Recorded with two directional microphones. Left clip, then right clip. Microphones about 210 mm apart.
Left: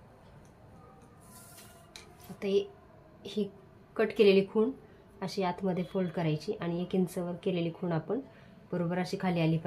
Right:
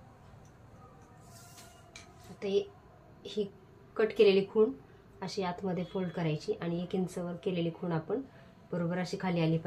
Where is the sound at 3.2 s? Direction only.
35° left (ahead or behind).